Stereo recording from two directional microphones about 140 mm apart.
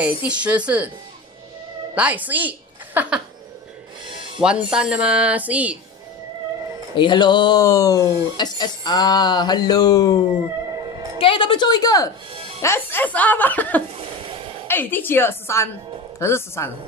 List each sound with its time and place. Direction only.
0.0 s speech: 10° right (ahead or behind)
2.0 s a woman's voice: 10° right (ahead or behind)
4.4 s speech: 5° right (ahead or behind)
7.0 s speech: 35° left (ahead or behind)
11.1 s speech: 40° left (ahead or behind)
12.6 s speech: 15° left (ahead or behind)